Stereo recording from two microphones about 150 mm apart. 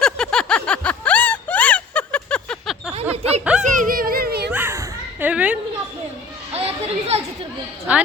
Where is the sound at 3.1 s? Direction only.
45° right (ahead or behind).